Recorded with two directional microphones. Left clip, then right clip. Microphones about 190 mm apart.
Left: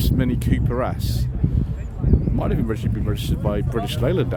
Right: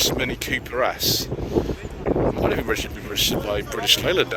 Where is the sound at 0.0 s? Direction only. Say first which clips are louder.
Right 3 dB; 25° left (ahead or behind).